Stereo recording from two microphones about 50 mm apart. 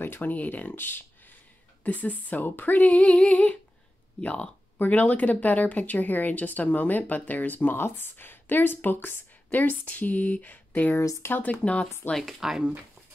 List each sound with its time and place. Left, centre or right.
0.0 s speech: left
1.8 s speech: left
12.3 s speech: centre